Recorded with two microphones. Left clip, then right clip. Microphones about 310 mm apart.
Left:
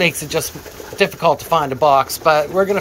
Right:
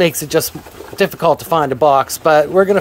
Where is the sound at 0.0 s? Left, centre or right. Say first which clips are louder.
Right 3 dB; right.